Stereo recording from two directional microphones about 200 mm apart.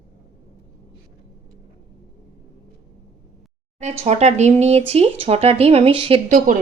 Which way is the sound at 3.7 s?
35° right (ahead or behind).